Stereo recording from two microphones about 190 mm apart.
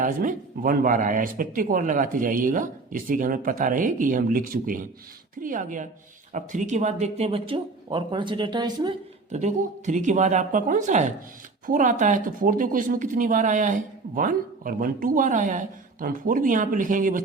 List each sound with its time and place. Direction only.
0.0 s speech: 45° right (ahead or behind); by 9.0 s 25° right (ahead or behind)
9.3 s speech: 40° right (ahead or behind)